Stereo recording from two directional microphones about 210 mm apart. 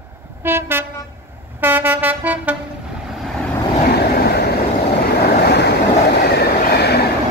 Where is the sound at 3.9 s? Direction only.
50° left (ahead or behind).